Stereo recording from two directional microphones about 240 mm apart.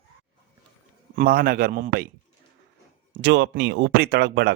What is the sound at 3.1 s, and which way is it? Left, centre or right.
Speech, right.